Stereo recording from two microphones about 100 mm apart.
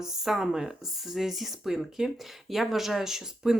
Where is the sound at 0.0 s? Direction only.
5° right (ahead or behind).